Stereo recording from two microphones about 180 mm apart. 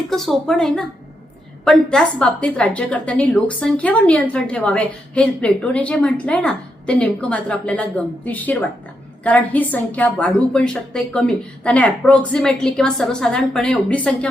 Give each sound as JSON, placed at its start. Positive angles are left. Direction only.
{"t": 0.1, "sound": "a woman's voice", "side_deg": 0}